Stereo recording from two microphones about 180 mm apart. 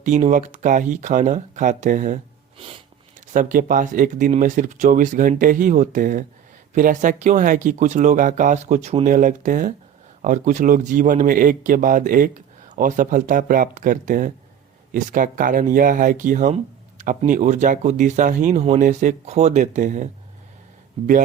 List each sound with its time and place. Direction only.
0.0 s speech: 40° right (ahead or behind)
2.6 s a sound: 30° right (ahead or behind)
3.2 s speech: 45° right (ahead or behind)